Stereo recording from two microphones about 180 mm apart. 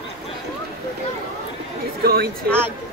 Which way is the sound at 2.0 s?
60° right (ahead or behind).